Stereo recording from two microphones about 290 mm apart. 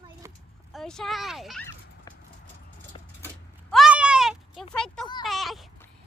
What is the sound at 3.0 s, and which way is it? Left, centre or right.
Keys jangling, centre.